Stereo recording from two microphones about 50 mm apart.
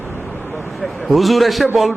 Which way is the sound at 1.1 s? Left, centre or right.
Centre.